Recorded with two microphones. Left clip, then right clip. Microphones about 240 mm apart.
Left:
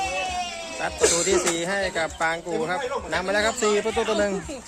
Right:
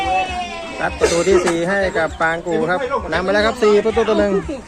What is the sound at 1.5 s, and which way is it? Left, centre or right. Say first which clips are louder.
Speech: right 8 dB; centre.